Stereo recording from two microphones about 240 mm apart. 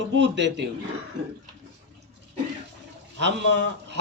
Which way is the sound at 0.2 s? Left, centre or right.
Right.